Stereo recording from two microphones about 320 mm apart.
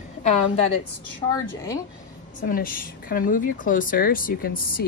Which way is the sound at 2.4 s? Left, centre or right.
Left.